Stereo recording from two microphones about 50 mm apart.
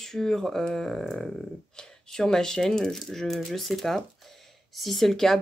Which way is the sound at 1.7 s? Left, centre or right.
Centre.